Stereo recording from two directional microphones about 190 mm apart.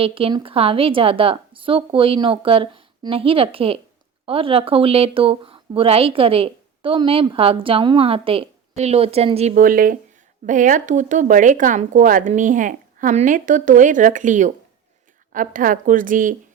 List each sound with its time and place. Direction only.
0.0 s speech: 30° right (ahead or behind)
9.6 s speech: 45° right (ahead or behind)